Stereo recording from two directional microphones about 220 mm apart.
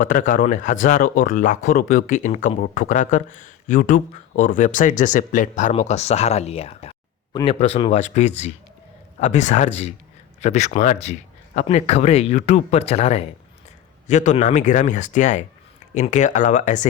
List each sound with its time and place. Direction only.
0.0 s a man's voice: 35° left (ahead or behind)